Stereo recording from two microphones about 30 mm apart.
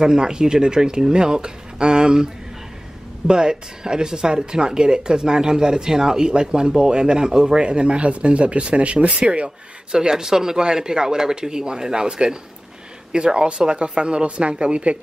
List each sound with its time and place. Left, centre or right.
0.0 s speech: right
9.9 s speech: centre; by 15.0 s right